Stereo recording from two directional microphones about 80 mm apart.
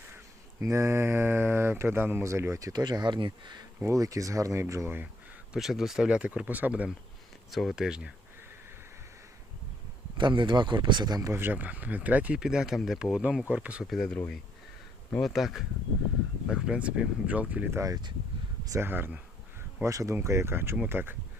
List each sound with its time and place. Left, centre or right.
0.6 s speech: right
3.8 s speech: right
5.5 s speech: centre
7.5 s speech: centre
7.9 s speech: centre
10.2 s a man's voice: right
11.3 s speech: right
13.8 s speech: centre
14.1 s speech: centre
15.2 s speech: centre
17.7 s speech: right
18.8 s speech: right
19.8 s speech: right